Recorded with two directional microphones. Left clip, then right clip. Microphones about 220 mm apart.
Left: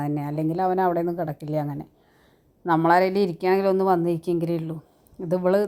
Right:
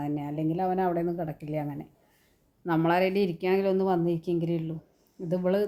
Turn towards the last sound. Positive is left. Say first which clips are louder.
# left 6 dB
turn(degrees=20)  # may be behind; listen again after turning